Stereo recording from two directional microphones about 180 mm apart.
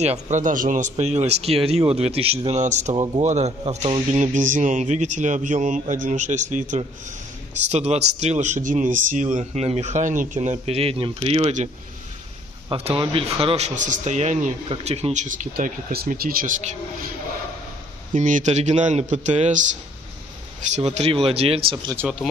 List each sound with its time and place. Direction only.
0.0 s a man's voice: 40° right (ahead or behind)
18.1 s a man's voice: 45° right (ahead or behind)
20.7 s a man's voice: 35° right (ahead or behind)